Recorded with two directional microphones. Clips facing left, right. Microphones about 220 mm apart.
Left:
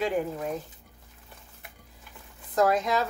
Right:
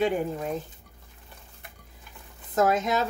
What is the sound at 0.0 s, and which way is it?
Speech, 25° right (ahead or behind).